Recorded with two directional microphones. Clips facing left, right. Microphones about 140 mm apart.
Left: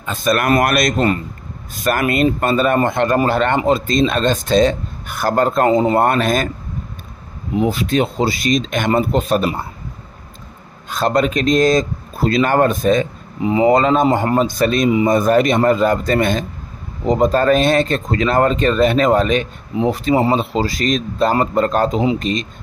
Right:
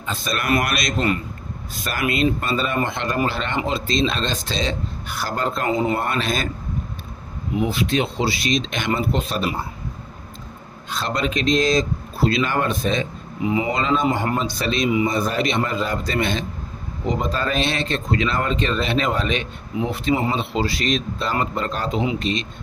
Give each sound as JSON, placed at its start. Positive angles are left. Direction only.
{"t": 0.0, "sound": "speech", "side_deg": 50}
{"t": 1.9, "sound": "speech", "side_deg": 50}
{"t": 5.9, "sound": "speech", "side_deg": 50}
{"t": 7.5, "sound": "speech", "side_deg": 40}
{"t": 10.9, "sound": "speech", "side_deg": 45}